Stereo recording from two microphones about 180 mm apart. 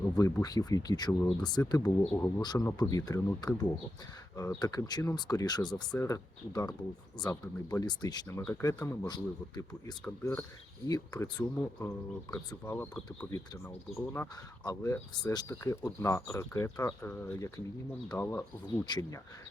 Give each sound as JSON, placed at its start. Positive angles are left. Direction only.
{"t": 0.1, "sound": "speech", "side_deg": 20}
{"t": 10.0, "sound": "speech", "side_deg": 5}
{"t": 10.8, "sound": "speech", "side_deg": 20}